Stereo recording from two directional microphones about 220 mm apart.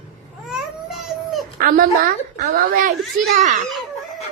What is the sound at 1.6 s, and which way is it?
Speech, 40° right (ahead or behind).